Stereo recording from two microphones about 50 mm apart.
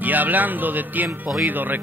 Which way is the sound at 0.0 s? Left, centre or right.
Right.